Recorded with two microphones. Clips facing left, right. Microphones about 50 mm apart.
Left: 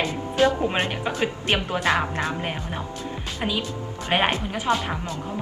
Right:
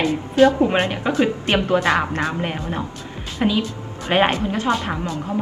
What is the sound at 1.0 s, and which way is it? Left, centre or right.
Speech, centre.